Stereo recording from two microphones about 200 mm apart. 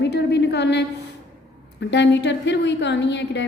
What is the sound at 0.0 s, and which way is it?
Speech, 60° left (ahead or behind).